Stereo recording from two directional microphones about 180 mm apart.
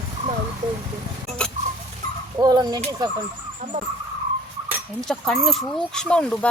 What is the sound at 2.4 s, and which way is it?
Speech, 20° right (ahead or behind).